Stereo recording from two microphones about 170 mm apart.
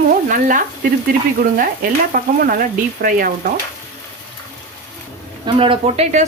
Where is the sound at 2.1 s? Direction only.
55° right (ahead or behind).